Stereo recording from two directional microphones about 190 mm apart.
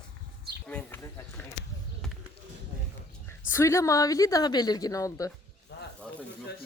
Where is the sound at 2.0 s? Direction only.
Centre (ahead or behind).